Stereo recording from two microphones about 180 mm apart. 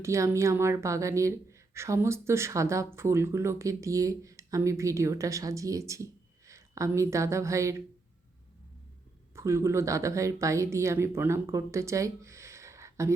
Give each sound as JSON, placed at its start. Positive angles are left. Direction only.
{"t": 0.0, "sound": "a woman's voice", "side_deg": -15}
{"t": 9.3, "sound": "speech", "side_deg": -15}